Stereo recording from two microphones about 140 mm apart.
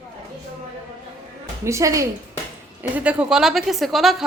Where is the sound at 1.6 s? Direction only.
20° right (ahead or behind).